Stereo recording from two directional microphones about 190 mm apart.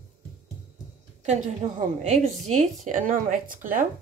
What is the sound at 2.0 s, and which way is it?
Speech, 35° right (ahead or behind).